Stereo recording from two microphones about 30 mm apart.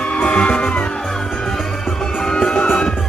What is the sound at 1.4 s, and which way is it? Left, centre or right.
Music, centre.